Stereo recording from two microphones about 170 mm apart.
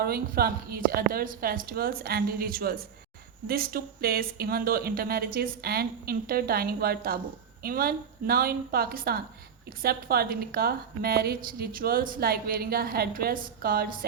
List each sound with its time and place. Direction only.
0.0 s speech: 65° right (ahead or behind)